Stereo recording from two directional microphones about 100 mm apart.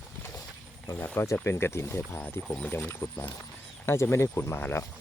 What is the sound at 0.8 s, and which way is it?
Speech, 25° left (ahead or behind).